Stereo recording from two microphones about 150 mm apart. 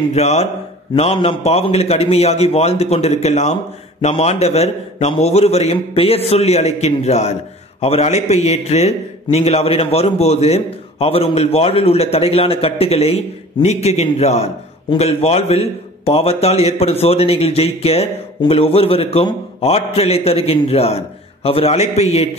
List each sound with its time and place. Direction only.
0.1 s a man's voice: 45° left (ahead or behind)